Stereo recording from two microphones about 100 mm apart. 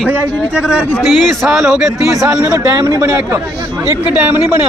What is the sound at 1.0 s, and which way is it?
Speech, centre (ahead or behind).